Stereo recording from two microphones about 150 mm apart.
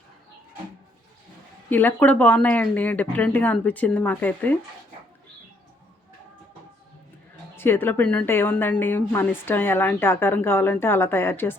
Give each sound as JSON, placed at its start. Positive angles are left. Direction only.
{"t": 1.7, "sound": "a woman's voice", "side_deg": 10}
{"t": 7.5, "sound": "a woman's voice", "side_deg": 15}